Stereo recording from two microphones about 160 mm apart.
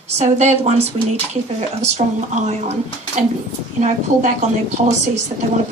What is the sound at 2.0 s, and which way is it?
Speech, 45° right (ahead or behind).